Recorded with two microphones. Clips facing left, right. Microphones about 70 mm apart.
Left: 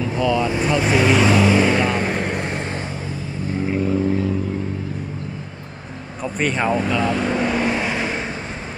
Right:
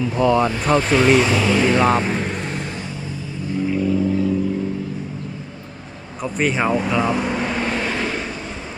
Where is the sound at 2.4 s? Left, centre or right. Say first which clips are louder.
Left 2 dB; left.